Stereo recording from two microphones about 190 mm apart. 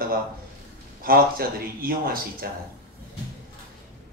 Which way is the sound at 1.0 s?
50° right (ahead or behind).